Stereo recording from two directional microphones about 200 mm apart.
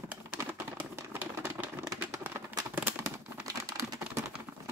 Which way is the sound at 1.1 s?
10° right (ahead or behind).